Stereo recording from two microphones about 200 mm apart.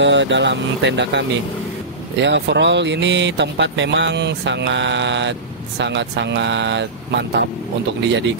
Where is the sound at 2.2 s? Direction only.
60° right (ahead or behind).